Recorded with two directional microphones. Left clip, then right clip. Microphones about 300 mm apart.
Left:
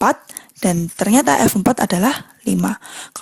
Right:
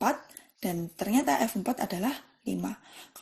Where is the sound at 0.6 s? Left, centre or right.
Left.